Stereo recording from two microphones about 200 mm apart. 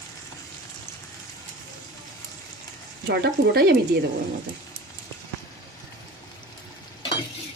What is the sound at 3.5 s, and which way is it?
Speech, 50° right (ahead or behind).